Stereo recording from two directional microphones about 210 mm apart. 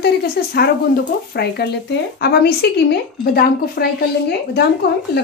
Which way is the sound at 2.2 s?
50° left (ahead or behind).